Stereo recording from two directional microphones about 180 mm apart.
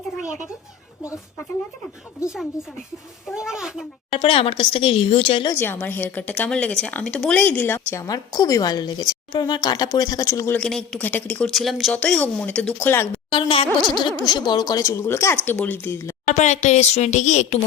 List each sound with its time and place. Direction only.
2.2 s a woman's voice: 5° right (ahead or behind)
4.1 s speech: 30° left (ahead or behind)
5.5 s a woman's voice: 10° left (ahead or behind)
10.6 s a woman's voice: 5° left (ahead or behind)
13.3 s a woman's voice: 30° left (ahead or behind)
16.2 s speech: 40° left (ahead or behind)